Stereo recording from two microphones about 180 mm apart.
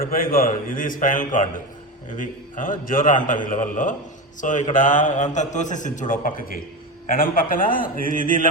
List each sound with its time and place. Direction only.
0.0 s a man's voice: 55° left (ahead or behind)